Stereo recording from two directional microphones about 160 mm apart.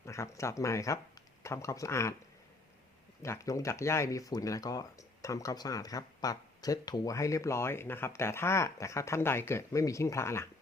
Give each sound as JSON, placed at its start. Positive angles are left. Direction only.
{"t": 0.0, "sound": "speech", "side_deg": 20}
{"t": 3.2, "sound": "speech", "side_deg": 20}